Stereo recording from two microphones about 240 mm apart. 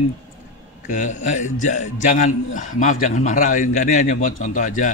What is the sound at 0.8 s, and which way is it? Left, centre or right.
A man's voice, left.